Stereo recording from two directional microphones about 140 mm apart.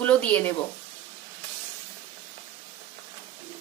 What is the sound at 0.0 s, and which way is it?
Speech, 10° left (ahead or behind).